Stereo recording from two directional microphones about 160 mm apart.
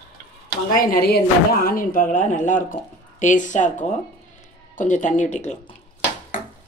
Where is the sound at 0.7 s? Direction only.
70° left (ahead or behind); by 5.6 s 45° left (ahead or behind).